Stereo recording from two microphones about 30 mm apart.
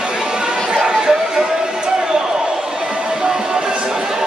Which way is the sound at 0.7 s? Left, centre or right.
Right.